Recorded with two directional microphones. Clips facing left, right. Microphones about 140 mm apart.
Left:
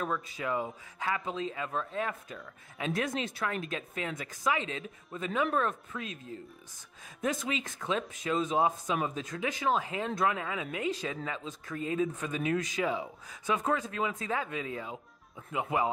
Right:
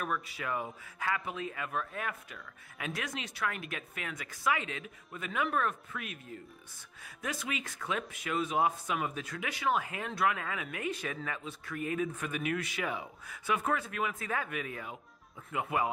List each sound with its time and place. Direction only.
0.0 s speech: 20° left (ahead or behind)